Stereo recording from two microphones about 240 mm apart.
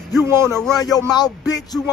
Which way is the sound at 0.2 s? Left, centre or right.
Centre.